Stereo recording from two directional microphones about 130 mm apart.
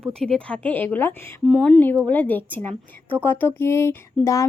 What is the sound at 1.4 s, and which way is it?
Speech, centre (ahead or behind).